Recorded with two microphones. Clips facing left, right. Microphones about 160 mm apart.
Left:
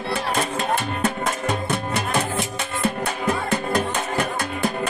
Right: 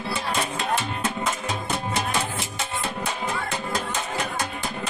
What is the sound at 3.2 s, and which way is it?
Music, 60° left (ahead or behind).